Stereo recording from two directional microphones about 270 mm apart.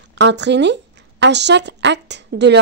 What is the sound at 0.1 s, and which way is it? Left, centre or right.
A woman's voice, right.